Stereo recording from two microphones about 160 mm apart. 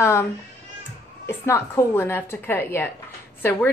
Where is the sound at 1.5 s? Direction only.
15° left (ahead or behind).